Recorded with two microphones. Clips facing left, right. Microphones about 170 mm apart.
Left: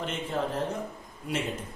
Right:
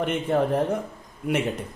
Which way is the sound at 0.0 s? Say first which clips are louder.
Right 8 dB; 60° right (ahead or behind).